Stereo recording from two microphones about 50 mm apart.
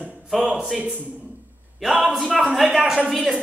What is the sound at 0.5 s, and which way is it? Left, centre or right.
Speech, centre.